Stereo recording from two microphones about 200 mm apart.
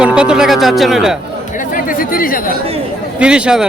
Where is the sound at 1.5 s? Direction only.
45° left (ahead or behind).